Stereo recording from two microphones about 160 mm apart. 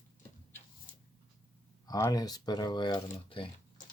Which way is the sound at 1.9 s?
20° left (ahead or behind).